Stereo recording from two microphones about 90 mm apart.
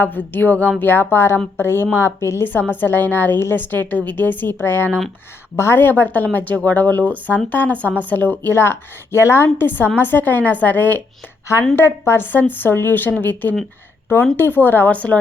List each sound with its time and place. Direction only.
0.0 s speech: 20° left (ahead or behind)